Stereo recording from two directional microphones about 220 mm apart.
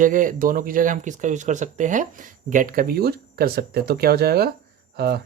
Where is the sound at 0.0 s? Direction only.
40° right (ahead or behind).